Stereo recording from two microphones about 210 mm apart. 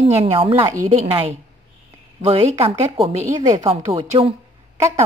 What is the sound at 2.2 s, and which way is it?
A woman's voice, 30° right (ahead or behind).